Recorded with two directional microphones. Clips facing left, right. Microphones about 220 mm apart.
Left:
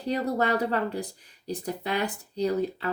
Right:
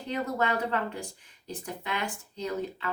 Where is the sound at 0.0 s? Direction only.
35° left (ahead or behind).